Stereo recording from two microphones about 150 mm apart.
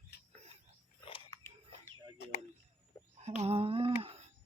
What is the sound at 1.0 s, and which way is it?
Biting, 35° left (ahead or behind).